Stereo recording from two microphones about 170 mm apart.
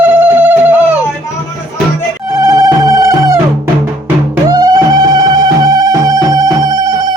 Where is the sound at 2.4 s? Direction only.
20° right (ahead or behind).